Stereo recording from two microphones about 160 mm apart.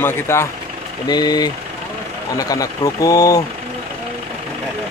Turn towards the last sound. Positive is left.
turn(degrees=20)  # may be behind; listen again after turning